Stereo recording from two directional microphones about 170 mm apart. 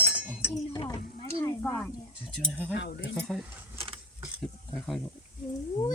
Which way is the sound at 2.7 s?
80° left.